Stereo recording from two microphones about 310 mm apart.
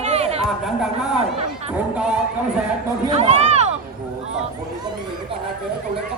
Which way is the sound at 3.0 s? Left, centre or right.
Right.